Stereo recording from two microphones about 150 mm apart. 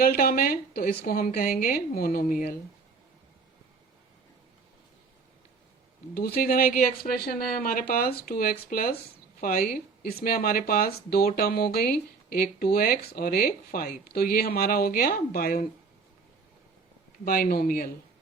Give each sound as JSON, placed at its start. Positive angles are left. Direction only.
{"t": 0.0, "sound": "speech", "side_deg": 75}
{"t": 6.1, "sound": "speech", "side_deg": 85}
{"t": 17.2, "sound": "speech", "side_deg": 75}